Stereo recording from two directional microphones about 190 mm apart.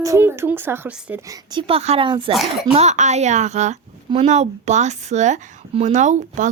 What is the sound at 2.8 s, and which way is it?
A woman's voice, 35° right (ahead or behind).